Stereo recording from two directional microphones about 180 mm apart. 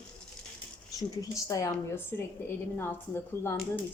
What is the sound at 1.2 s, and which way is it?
A woman's voice, 20° left (ahead or behind).